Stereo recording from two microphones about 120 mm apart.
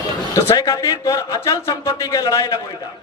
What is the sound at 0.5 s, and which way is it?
A man's voice, 30° left (ahead or behind).